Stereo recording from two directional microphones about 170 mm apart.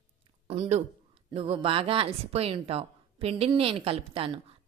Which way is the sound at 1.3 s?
35° right (ahead or behind).